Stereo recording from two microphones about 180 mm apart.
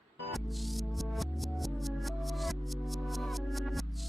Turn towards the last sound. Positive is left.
turn(degrees=0)  # may be behind; listen again after turning